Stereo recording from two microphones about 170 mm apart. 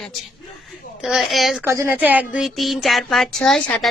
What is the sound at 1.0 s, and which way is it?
Speech, centre (ahead or behind).